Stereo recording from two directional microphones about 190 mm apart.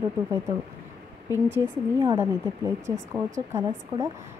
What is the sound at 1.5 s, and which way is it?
Speech, 15° right (ahead or behind).